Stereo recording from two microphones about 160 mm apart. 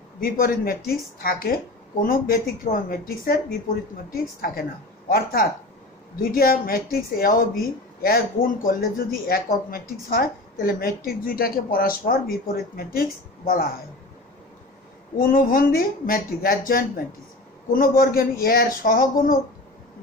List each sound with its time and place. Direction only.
0.2 s a woman's voice: 65° left (ahead or behind)
15.1 s a woman's voice: 60° left (ahead or behind)